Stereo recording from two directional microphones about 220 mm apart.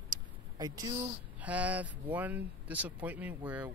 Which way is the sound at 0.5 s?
15° right (ahead or behind).